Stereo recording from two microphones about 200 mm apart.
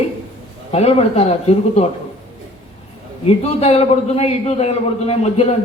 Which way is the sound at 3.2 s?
30° left (ahead or behind).